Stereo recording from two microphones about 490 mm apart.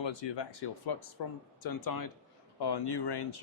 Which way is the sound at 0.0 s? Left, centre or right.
Left.